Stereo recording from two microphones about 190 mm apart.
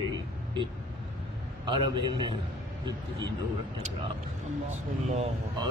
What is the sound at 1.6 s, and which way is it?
Speech, 25° right (ahead or behind).